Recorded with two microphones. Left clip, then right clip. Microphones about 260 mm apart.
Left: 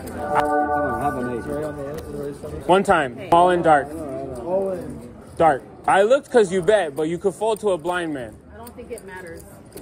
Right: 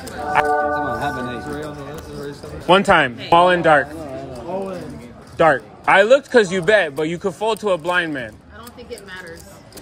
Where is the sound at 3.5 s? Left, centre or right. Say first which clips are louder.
Right 2 dB; right.